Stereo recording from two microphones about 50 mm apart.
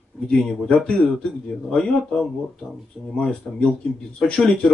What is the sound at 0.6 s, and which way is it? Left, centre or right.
Speech, centre.